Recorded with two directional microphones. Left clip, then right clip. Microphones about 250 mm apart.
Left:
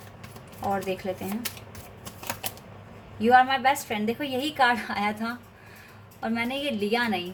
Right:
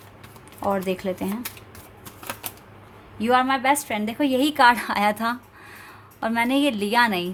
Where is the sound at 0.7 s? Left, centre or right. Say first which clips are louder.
Right 4 dB; right.